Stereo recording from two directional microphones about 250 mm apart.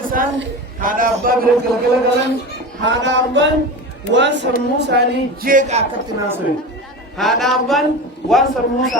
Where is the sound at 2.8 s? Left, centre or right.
Right.